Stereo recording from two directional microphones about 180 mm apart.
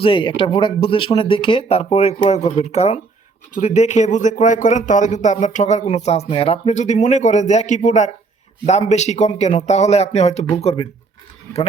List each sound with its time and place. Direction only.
0.0 s speech: 30° left (ahead or behind)